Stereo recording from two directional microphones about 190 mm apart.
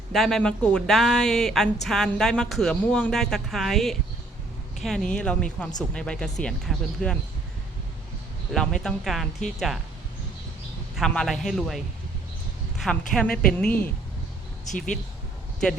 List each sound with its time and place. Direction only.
0.1 s speech: centre (ahead or behind)
8.5 s speech: 5° left (ahead or behind)
10.9 s speech: 5° left (ahead or behind)
14.7 s speech: 40° left (ahead or behind)